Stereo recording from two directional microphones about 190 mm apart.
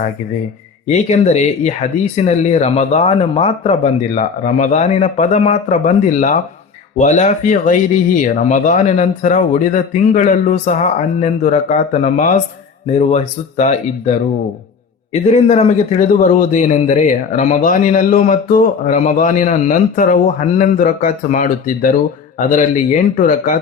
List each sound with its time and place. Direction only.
0.9 s a man's voice: 35° left (ahead or behind)